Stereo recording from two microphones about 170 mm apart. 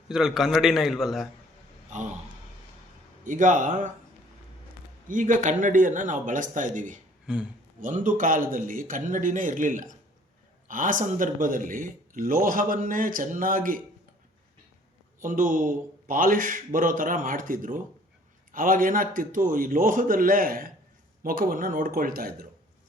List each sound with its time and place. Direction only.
0.1 s a man's voice: centre (ahead or behind)
3.2 s speech: 50° right (ahead or behind)
5.0 s speech: 50° right (ahead or behind)
7.3 s a man's voice: 5° right (ahead or behind)
7.8 s speech: 50° right (ahead or behind)
15.2 s speech: 50° right (ahead or behind)